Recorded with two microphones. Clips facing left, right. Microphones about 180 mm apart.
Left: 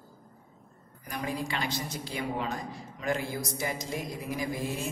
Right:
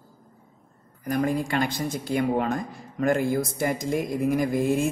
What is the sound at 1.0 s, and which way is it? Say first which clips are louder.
Speech: right 9 dB; 50° right (ahead or behind).